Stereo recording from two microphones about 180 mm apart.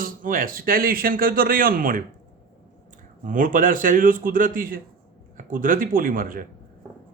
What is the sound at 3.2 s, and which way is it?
Speech, 50° right (ahead or behind).